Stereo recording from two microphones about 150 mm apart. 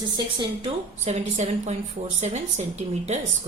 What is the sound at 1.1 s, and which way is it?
A woman's voice, 50° right (ahead or behind).